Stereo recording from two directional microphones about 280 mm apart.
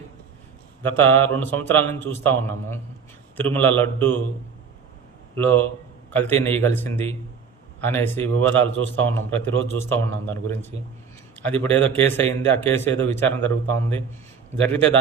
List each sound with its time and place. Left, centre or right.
0.8 s speech: centre
5.4 s speech: centre
9.0 s a man's voice: right
9.7 s speech: centre